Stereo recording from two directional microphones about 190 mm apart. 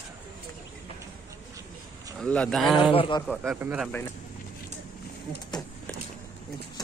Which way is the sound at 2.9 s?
30° left (ahead or behind).